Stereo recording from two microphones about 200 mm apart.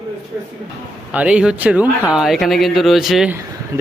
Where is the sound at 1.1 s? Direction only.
5° right (ahead or behind).